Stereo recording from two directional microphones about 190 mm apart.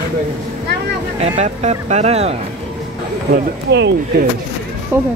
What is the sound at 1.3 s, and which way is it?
Speech, 35° right (ahead or behind).